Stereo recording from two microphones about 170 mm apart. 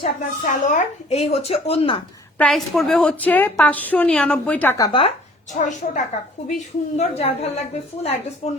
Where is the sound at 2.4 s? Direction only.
Centre (ahead or behind).